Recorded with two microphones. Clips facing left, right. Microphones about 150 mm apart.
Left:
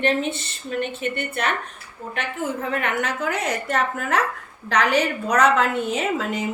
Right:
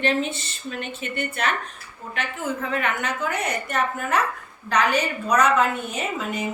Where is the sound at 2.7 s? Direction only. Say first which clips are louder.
Left 1 dB; 70° left (ahead or behind); by 6.4 s 90° left.